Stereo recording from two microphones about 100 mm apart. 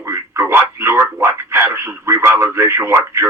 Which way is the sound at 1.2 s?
25° right (ahead or behind).